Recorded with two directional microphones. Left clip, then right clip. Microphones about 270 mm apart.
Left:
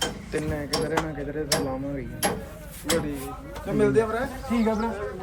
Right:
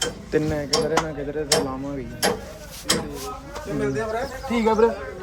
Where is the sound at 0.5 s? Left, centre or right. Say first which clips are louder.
Right 2 dB; right.